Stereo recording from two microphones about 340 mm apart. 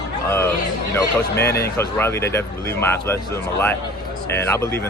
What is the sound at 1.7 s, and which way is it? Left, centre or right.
Speech, centre.